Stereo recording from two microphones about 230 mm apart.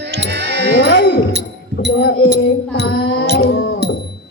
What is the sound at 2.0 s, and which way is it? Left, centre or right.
Music, left.